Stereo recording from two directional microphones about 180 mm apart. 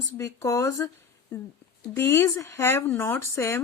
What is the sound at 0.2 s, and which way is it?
A woman's voice, 15° left (ahead or behind).